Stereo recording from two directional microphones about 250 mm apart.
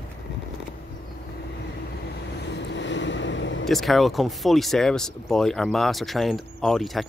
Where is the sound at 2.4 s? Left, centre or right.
Left.